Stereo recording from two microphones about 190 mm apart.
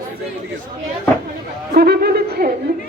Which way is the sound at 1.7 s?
55° right (ahead or behind).